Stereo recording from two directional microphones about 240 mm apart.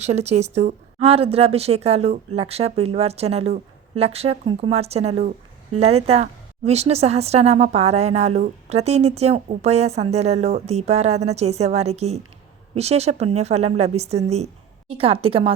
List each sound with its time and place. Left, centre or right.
0.0 s a woman's voice: right